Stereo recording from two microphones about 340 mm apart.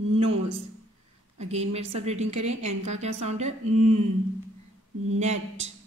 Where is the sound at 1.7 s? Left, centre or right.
Centre.